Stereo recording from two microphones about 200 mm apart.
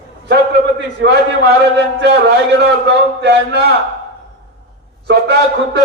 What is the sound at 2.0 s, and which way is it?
A man's voice, 55° right (ahead or behind).